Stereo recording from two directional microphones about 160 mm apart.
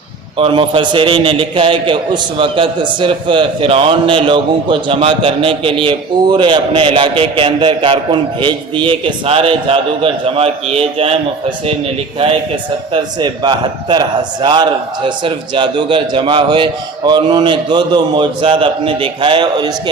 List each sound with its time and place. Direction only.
0.3 s a man's voice: 35° right (ahead or behind)
12.9 s a man's voice: 30° right (ahead or behind)